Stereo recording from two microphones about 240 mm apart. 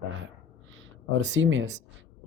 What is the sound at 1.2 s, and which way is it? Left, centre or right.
Speech, right.